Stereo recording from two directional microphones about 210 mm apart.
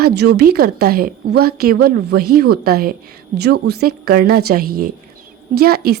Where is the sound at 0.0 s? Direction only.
50° right (ahead or behind).